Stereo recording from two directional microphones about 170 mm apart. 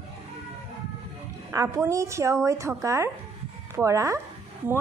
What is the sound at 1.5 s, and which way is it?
A woman's voice, 20° right (ahead or behind).